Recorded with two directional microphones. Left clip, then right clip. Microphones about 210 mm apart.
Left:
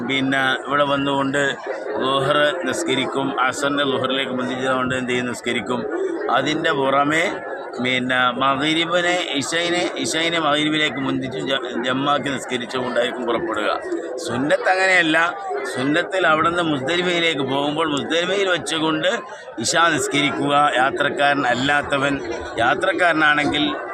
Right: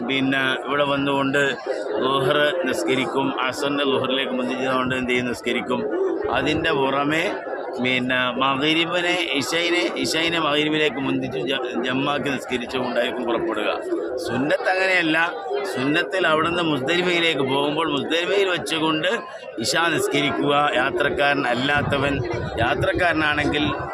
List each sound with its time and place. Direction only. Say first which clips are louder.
0.1 s mantra: left 2 dB; 20° left (ahead or behind)
3.4 s a man's voice: left 3 dB; 15° left (ahead or behind)
4.6 s mantra: left 2 dB; 15° left (ahead or behind)
13.0 s a man's voice: left 2 dB; 20° left (ahead or behind)
15.8 s mantra: left 3 dB; 10° left (ahead or behind)